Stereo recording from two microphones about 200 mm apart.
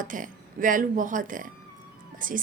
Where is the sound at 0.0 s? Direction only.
40° right (ahead or behind).